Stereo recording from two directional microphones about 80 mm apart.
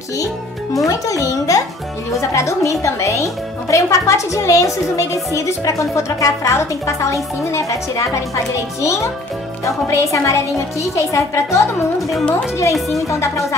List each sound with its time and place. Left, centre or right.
0.8 s a child's voice: left
13.1 s a woman's voice: left